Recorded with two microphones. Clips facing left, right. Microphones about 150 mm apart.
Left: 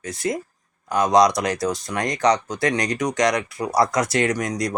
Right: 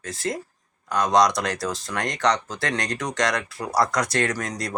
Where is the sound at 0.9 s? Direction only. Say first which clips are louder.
Left 3 dB; 20° left (ahead or behind).